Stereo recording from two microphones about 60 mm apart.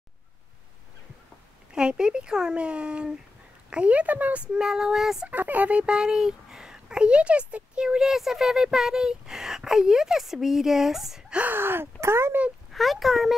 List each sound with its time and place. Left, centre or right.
1.7 s a child's voice: centre
4.6 s a child's voice: centre
5.3 s a child's voice: right; by 11.3 s centre
11.5 s speech: right
12.7 s speech: centre